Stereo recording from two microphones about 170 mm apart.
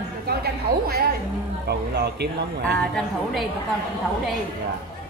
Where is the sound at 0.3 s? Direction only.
65° right (ahead or behind).